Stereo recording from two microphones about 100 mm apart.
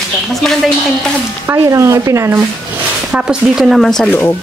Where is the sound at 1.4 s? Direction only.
30° right (ahead or behind).